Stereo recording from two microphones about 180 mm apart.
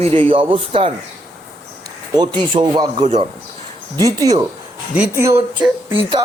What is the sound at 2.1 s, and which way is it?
A man's voice, 25° right (ahead or behind).